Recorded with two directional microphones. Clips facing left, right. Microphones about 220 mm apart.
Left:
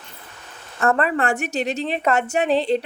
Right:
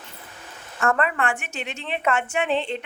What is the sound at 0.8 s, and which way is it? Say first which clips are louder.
A woman's voice: left 3 dB; 35° left (ahead or behind).